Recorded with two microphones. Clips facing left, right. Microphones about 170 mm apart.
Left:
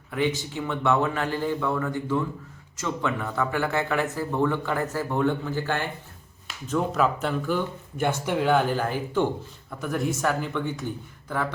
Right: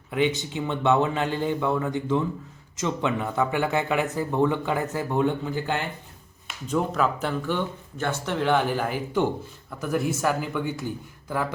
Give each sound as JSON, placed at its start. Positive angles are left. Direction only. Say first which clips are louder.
{"t": 0.1, "sound": "a man's voice", "louder": "right 2 dB", "side_deg": -20}
{"t": 6.9, "sound": "speech", "louder": "left 1 dB", "side_deg": 0}
{"t": 7.9, "sound": "a man's voice", "louder": "left 2 dB", "side_deg": 15}
{"t": 8.7, "sound": "a man's voice", "louder": "even", "side_deg": -10}